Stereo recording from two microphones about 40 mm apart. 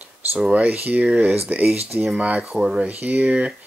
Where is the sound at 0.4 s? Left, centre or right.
Right.